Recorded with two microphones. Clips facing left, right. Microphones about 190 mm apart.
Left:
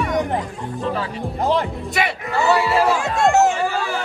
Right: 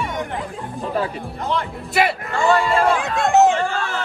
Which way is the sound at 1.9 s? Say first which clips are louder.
Right 3 dB; centre (ahead or behind).